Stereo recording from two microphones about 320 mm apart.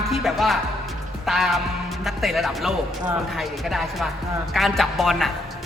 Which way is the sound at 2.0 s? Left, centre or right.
Centre.